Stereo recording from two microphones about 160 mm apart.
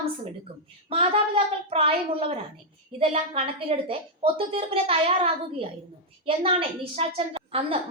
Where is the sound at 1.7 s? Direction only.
35° right (ahead or behind).